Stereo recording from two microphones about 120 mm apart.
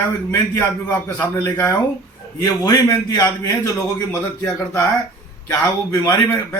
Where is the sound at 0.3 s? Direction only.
20° left (ahead or behind).